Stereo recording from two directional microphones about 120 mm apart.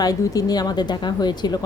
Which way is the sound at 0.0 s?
30° left (ahead or behind).